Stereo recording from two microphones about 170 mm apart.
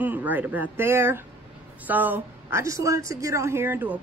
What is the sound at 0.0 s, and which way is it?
A woman's voice, 10° right (ahead or behind).